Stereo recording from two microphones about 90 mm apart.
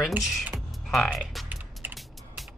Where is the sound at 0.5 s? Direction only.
Centre (ahead or behind).